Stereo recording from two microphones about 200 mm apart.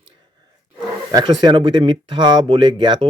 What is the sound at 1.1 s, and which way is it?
Speech, 20° right (ahead or behind).